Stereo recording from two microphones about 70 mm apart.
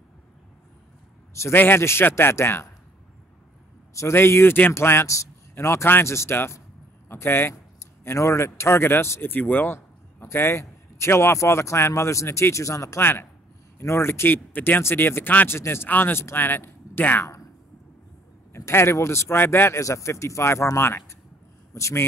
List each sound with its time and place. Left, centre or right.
1.5 s speech: left
3.9 s a man's voice: left
4.2 s speech: left
8.0 s speech: left
9.8 s speech: left
13.0 s speech: left
18.7 s speech: left
19.8 s speech: left